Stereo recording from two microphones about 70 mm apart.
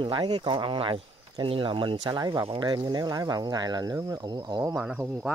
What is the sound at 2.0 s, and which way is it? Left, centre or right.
Speech, right.